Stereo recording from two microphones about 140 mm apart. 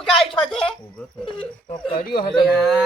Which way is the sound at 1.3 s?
40° left (ahead or behind).